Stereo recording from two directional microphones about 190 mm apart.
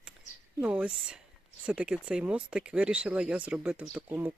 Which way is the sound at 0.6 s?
5° right (ahead or behind).